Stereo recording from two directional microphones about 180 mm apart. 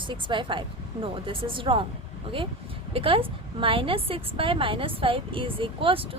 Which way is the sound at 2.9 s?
30° right (ahead or behind).